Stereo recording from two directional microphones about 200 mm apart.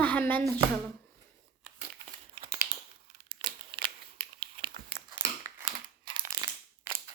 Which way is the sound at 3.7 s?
50° right (ahead or behind).